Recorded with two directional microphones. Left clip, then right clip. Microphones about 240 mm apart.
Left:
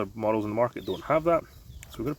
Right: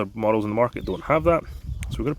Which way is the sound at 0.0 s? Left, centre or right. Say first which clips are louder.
Right 5 dB; right.